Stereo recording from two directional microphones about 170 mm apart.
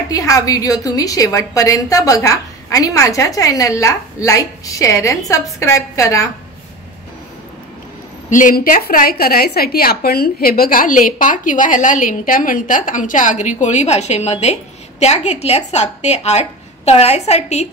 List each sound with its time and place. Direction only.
0.1 s a woman's voice: 20° left (ahead or behind)
8.3 s a woman's voice: 50° left (ahead or behind)